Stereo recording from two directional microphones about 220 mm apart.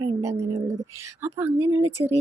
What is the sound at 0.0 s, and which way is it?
Speech, 15° right (ahead or behind).